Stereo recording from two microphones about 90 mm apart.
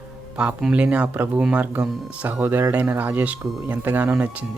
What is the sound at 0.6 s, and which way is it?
Speech, 15° right (ahead or behind).